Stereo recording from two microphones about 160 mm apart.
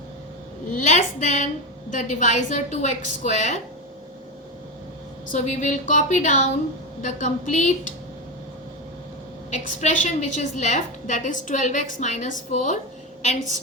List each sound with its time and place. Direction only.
0.7 s a woman's voice: 50° left (ahead or behind)
5.3 s a woman's voice: 50° left (ahead or behind)
9.5 s a woman's voice: 50° left (ahead or behind)